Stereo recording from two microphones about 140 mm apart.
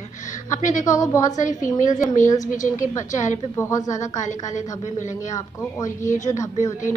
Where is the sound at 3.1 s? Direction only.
60° left (ahead or behind).